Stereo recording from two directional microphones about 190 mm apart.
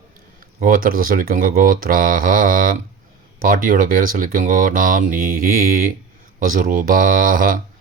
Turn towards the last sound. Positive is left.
turn(degrees=-45)  # may be behind; listen again after turning